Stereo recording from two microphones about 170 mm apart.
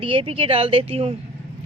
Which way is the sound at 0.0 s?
30° right (ahead or behind).